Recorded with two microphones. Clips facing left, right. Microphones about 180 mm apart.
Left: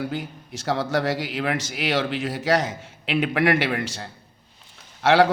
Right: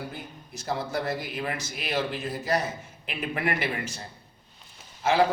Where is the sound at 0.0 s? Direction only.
80° left.